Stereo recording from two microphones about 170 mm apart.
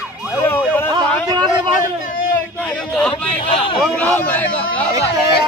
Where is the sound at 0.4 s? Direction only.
10° left (ahead or behind).